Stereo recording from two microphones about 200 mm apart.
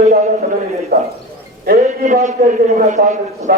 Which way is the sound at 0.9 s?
45° right (ahead or behind).